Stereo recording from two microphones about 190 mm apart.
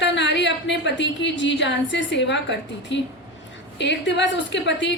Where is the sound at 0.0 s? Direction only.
65° left (ahead or behind).